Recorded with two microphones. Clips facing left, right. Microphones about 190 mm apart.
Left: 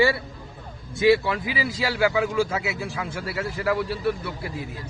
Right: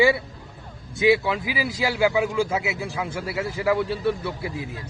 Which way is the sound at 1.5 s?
5° right (ahead or behind).